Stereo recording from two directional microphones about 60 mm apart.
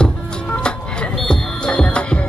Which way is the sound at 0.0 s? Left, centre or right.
Centre.